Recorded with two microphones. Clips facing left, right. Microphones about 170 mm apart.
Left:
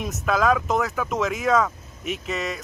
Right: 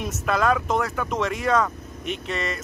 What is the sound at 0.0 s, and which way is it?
Speech, centre (ahead or behind).